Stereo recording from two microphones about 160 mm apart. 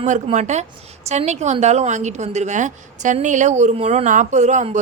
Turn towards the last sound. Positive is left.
turn(degrees=-45)  # may be behind; listen again after turning